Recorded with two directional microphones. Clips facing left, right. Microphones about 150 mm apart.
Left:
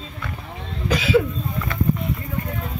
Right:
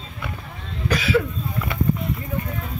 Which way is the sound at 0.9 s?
10° left (ahead or behind).